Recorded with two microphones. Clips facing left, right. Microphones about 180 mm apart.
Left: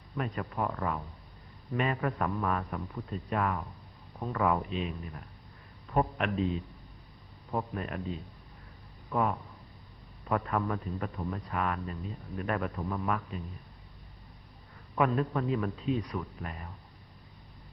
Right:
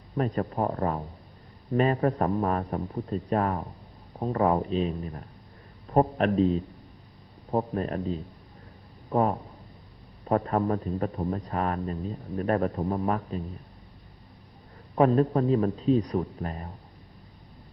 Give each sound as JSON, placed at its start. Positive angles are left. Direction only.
{"t": 0.2, "sound": "speech", "side_deg": -35}
{"t": 14.9, "sound": "speech", "side_deg": -35}